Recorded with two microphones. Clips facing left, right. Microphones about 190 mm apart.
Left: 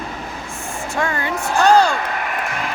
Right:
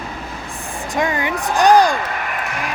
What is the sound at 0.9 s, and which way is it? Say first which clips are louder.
Speech: right 2 dB; 15° right (ahead or behind).